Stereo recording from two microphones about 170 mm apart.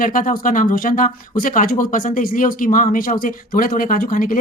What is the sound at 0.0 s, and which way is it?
Speech, 55° left (ahead or behind).